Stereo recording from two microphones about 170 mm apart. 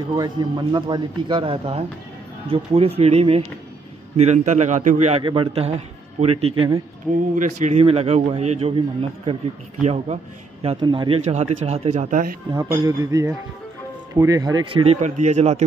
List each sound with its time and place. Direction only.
0.1 s a man's voice: 25° right (ahead or behind); by 5.2 s 45° right (ahead or behind)
5.2 s speech: 30° right (ahead or behind)
10.6 s speech: 30° right (ahead or behind)
11.2 s speech: 40° right (ahead or behind)
12.7 s speech: 20° right (ahead or behind)
15.0 s a man's voice: 45° right (ahead or behind)